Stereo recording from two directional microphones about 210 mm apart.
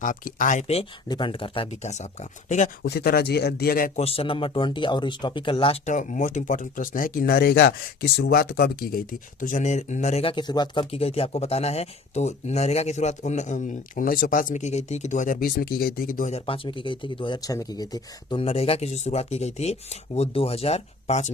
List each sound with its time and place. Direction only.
0.0 s speech: 40° left (ahead or behind)
2.8 s speech: 50° left (ahead or behind)
4.0 s speech: 25° left (ahead or behind)